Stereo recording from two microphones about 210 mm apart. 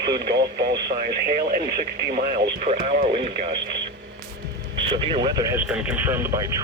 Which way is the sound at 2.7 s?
35° right (ahead or behind).